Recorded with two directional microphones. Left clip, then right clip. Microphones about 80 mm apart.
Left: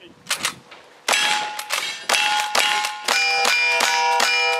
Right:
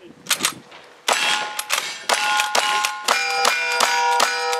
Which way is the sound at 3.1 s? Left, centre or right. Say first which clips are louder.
Left 2 dB; left.